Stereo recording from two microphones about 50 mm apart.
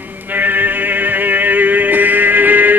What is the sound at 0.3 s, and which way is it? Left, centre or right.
Music, right.